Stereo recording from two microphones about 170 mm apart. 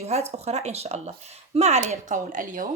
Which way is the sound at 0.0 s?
40° right (ahead or behind).